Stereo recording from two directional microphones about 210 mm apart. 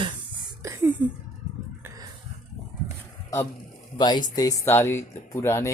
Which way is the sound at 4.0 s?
20° left (ahead or behind).